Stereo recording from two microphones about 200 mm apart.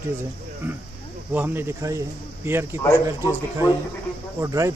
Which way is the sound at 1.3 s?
10° right (ahead or behind).